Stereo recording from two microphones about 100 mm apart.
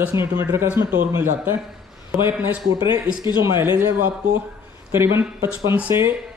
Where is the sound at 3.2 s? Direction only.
45° left (ahead or behind).